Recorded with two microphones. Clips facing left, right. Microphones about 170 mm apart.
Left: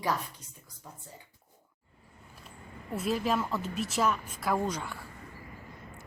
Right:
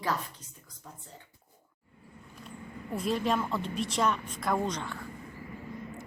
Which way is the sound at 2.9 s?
5° left (ahead or behind).